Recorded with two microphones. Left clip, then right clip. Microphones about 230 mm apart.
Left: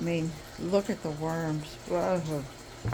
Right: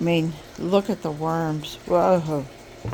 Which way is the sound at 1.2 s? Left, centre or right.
Right.